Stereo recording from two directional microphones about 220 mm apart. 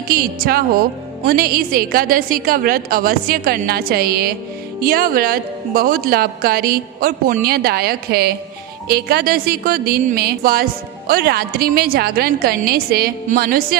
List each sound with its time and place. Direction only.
0.1 s a woman's voice: 40° right (ahead or behind)